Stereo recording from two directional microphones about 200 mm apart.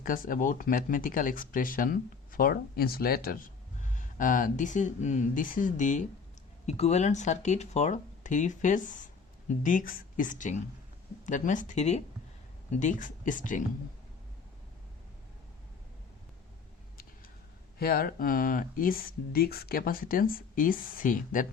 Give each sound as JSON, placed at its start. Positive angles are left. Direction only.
{"t": 0.0, "sound": "speech", "side_deg": 45}
{"t": 17.7, "sound": "speech", "side_deg": 50}